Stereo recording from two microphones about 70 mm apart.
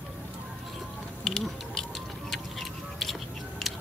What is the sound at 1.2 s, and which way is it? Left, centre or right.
Music, centre.